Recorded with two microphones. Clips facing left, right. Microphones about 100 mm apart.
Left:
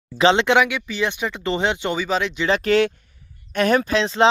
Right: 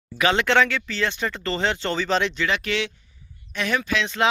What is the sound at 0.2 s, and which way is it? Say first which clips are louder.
Speech: left 4 dB; 25° left (ahead or behind).